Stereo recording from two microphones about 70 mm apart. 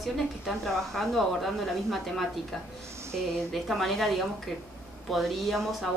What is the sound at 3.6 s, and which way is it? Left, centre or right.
A woman's voice, centre.